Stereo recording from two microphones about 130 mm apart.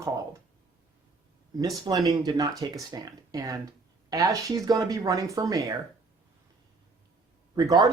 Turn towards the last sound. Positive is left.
turn(degrees=-30)  # may be behind; listen again after turning